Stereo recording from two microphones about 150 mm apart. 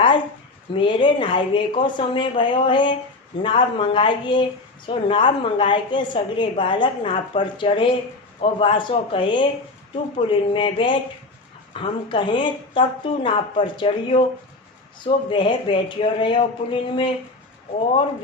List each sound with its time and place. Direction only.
0.7 s a woman's voice: 35° left (ahead or behind)
15.3 s a woman's voice: 35° left (ahead or behind)